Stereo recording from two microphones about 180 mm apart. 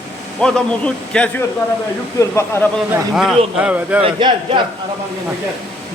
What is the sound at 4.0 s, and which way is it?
Speech, 30° right (ahead or behind).